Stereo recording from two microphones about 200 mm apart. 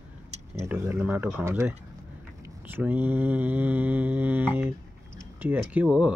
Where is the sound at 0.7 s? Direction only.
10° right (ahead or behind).